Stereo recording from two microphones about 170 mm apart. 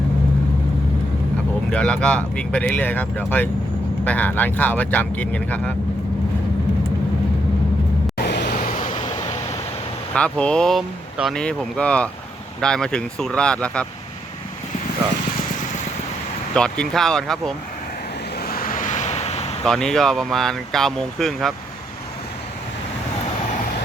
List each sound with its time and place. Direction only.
1.7 s speech: 5° left (ahead or behind)
8.2 s vehicle: 70° left (ahead or behind); by 9.0 s 45° left (ahead or behind)
10.2 s speech: 5° left (ahead or behind)
16.6 s speech: 5° left (ahead or behind)
18.3 s vehicle: 60° left (ahead or behind); by 19.5 s 40° left (ahead or behind)
19.6 s speech: 5° left (ahead or behind)